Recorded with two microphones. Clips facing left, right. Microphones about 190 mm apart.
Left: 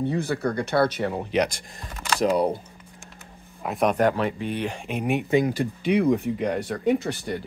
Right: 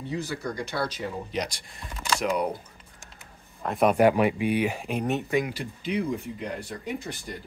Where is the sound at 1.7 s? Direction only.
40° left (ahead or behind).